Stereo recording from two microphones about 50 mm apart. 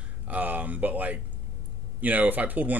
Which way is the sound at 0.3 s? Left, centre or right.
Right.